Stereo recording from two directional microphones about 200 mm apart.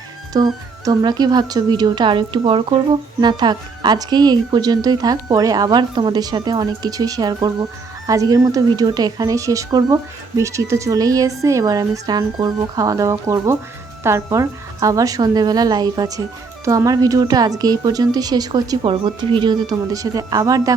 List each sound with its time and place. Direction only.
0.3 s a woman's voice: 20° right (ahead or behind)